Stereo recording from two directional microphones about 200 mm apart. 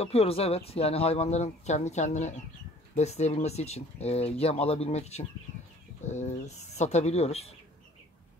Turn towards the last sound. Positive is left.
turn(degrees=30)  # may be behind; listen again after turning